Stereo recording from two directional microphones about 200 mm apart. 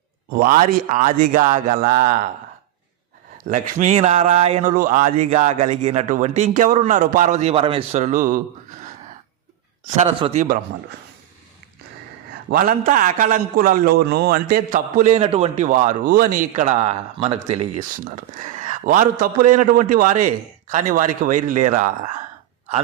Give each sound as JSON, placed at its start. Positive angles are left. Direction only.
{"t": 0.3, "sound": "a man's voice", "side_deg": -45}
{"t": 3.4, "sound": "a man's voice", "side_deg": -40}
{"t": 9.9, "sound": "a man's voice", "side_deg": -30}
{"t": 12.5, "sound": "a man's voice", "side_deg": -45}